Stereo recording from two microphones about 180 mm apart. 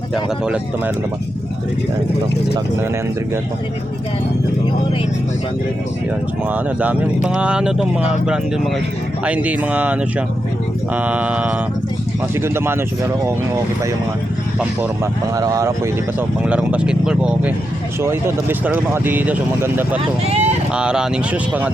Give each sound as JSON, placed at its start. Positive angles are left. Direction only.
{"t": 6.5, "sound": "speech", "side_deg": -10}
{"t": 15.4, "sound": "speech", "side_deg": -20}
{"t": 16.4, "sound": "speech", "side_deg": -5}
{"t": 20.2, "sound": "speech", "side_deg": -35}
{"t": 20.7, "sound": "speech", "side_deg": -5}